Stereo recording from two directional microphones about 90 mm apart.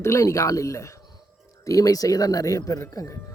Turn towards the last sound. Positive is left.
turn(degrees=35)  # may be behind; listen again after turning